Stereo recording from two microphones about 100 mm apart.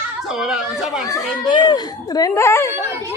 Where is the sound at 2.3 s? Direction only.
25° left (ahead or behind).